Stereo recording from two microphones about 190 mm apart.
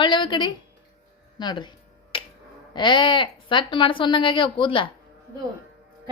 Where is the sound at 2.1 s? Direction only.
25° left (ahead or behind).